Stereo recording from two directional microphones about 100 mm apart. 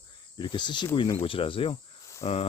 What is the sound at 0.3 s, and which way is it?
Speech, 50° left (ahead or behind).